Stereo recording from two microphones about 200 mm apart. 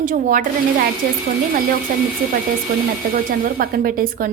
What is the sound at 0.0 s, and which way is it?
Speech, 40° right (ahead or behind).